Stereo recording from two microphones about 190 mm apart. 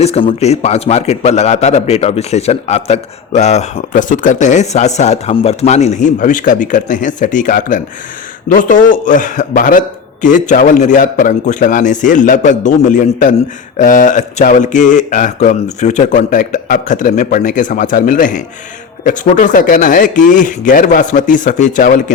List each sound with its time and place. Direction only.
0.0 s a man's voice: 30° left (ahead or behind)